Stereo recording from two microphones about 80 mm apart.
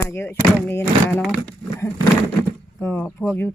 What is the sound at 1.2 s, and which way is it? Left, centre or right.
Speech, centre.